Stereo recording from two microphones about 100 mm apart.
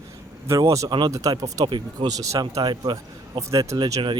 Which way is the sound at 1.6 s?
50° right (ahead or behind).